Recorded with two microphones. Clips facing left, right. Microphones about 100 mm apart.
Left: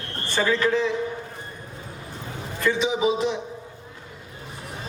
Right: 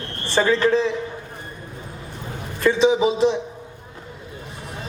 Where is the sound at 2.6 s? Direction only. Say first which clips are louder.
Right 5 dB; 30° right (ahead or behind).